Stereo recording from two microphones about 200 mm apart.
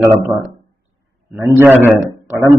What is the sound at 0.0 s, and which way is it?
Speech, 15° right (ahead or behind).